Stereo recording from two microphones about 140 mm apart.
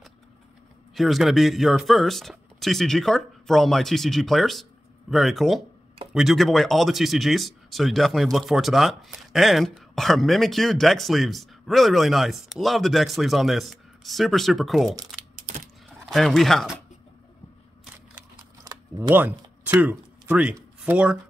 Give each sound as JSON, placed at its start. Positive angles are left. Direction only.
{"t": 0.9, "sound": "speech", "side_deg": 0}
{"t": 16.1, "sound": "speech", "side_deg": 0}
{"t": 18.6, "sound": "camera", "side_deg": -25}
{"t": 19.6, "sound": "speech", "side_deg": -10}